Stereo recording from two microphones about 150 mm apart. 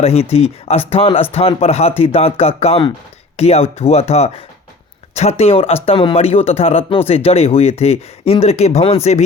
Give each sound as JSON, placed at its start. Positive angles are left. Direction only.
{"t": 0.0, "sound": "speech", "side_deg": 40}
{"t": 5.4, "sound": "speech", "side_deg": 40}